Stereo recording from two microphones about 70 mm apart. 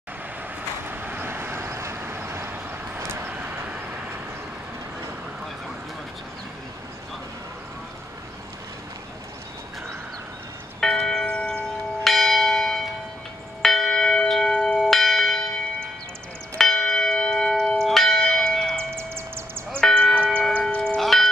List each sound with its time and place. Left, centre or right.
0.8 s vehicle: right
10.8 s church bell: centre
12.0 s church bell: centre
18.9 s a sound: right
19.8 s music: centre
20.6 s church bell: centre
21.0 s church bell: centre